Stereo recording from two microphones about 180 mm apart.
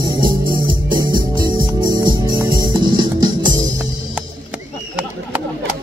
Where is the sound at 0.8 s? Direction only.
25° right (ahead or behind).